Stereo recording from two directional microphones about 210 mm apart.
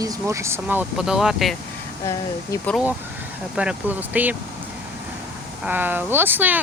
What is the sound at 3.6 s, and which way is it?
Speech, 5° right (ahead or behind).